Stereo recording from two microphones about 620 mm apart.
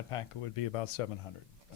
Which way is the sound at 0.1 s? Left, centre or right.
Left.